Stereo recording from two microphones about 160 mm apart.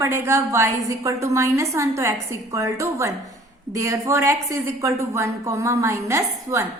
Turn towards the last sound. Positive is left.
turn(degrees=-20)  # may be behind; listen again after turning